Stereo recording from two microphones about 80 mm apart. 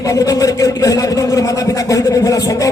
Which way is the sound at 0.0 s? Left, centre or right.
Left.